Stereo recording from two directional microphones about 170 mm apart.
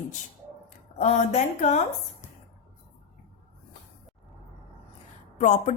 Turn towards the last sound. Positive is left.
turn(degrees=45)  # may be behind; listen again after turning